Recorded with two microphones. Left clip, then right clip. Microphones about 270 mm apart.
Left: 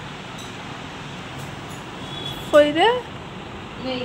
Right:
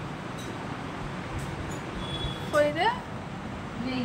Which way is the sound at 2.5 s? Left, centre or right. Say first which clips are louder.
Left 9 dB; centre.